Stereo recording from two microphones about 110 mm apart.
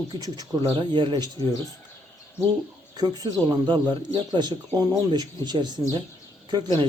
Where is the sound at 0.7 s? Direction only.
45° right (ahead or behind).